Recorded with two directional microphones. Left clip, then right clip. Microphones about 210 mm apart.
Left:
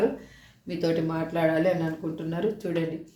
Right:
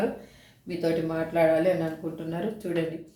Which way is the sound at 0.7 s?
35° left (ahead or behind).